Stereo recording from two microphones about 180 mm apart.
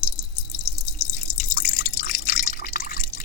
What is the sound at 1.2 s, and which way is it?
Drip, 45° left (ahead or behind).